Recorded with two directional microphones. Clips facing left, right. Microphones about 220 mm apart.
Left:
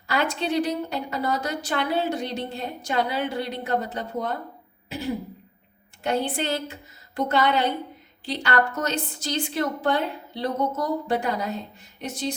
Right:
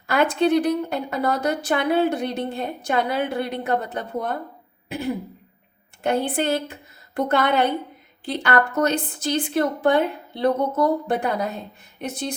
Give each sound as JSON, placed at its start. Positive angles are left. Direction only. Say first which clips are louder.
{"t": 0.1, "sound": "a woman's voice", "louder": "right 6 dB", "side_deg": -55}
{"t": 4.9, "sound": "throat clearing", "louder": "right 3 dB", "side_deg": -55}
{"t": 6.0, "sound": "a woman's voice", "louder": "right 3 dB", "side_deg": -55}